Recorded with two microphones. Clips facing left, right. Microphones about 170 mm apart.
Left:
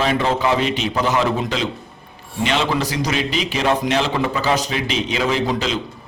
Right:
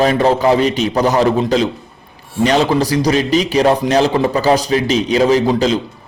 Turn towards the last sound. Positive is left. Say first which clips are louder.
# right 7 dB
turn(degrees=-35)  # may be behind; listen again after turning